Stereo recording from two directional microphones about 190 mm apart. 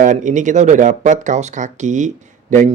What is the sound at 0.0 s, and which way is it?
Speech, 40° right (ahead or behind).